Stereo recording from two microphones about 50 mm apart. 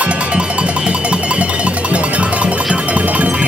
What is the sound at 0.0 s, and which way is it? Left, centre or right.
Music, right.